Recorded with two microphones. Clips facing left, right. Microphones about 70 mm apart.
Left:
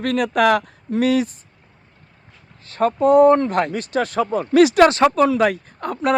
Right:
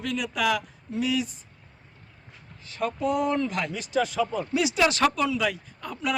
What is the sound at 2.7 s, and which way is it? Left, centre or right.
Speech, left.